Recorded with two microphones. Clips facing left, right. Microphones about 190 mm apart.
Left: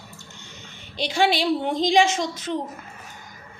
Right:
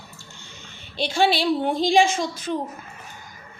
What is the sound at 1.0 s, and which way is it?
A woman's voice, 15° left (ahead or behind).